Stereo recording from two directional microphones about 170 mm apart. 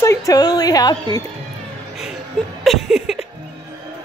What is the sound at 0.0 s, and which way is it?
Speech, 20° left (ahead or behind).